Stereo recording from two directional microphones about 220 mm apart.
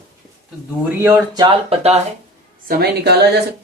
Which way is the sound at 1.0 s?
15° right (ahead or behind).